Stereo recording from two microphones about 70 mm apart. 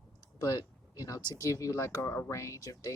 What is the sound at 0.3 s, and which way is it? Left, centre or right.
Speech, left.